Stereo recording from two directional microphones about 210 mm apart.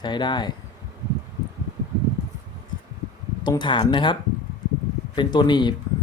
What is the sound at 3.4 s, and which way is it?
Speech, 20° left (ahead or behind).